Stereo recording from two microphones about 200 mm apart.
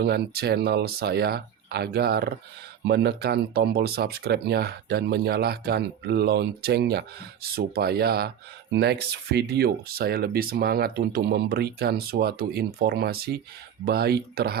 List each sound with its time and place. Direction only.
0.0 s speech: 55° right (ahead or behind)